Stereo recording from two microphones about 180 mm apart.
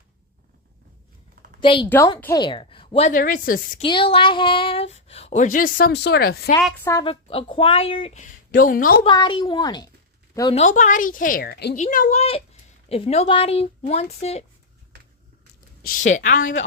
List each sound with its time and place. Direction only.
1.6 s a woman's voice: 25° left (ahead or behind)
1.9 s a woman's voice: 15° left (ahead or behind); by 3.1 s 30° left (ahead or behind)
3.1 s speech: 50° left (ahead or behind)
3.8 s speech: 30° left (ahead or behind); by 6.5 s 60° left (ahead or behind)
7.0 s speech: 30° left (ahead or behind); by 9.0 s 50° left (ahead or behind)
9.0 s a woman's voice: 25° left (ahead or behind)
10.5 s speech: 40° left (ahead or behind); by 11.8 s 60° left (ahead or behind)
11.8 s speech: 45° left (ahead or behind)
15.8 s speech: 50° left (ahead or behind)